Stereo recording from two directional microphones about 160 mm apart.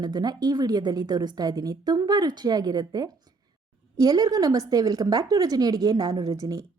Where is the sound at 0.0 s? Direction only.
25° right (ahead or behind).